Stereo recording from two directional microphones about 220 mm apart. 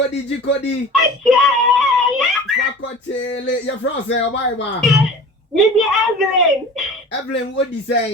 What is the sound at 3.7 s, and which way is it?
Speech, 55° left (ahead or behind).